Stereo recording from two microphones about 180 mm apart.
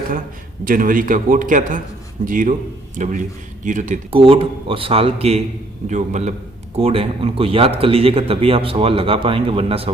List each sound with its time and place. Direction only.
0.6 s a man's voice: 50° right (ahead or behind)
4.1 s speech: 30° right (ahead or behind)